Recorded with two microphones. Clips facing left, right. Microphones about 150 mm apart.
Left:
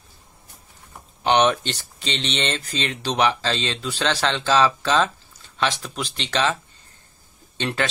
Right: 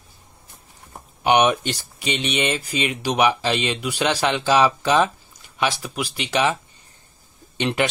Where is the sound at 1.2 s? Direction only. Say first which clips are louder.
Right 1 dB; 10° right (ahead or behind).